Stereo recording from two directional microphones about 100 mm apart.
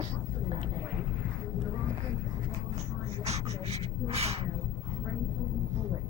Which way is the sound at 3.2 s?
90° right.